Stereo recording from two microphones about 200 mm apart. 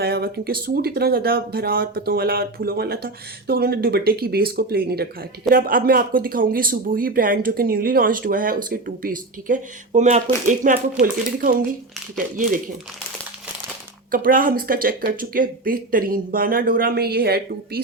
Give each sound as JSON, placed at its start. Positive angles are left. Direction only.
{"t": 0.0, "sound": "speech", "side_deg": -50}
{"t": 14.1, "sound": "speech", "side_deg": -45}